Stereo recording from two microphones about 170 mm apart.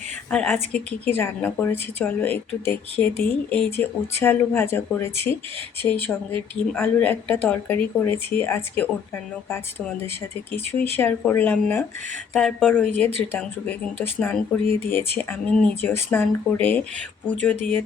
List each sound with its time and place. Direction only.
0.3 s a woman's voice: 5° left (ahead or behind)
10.5 s a woman's voice: 10° left (ahead or behind)
14.2 s a woman's voice: 10° left (ahead or behind)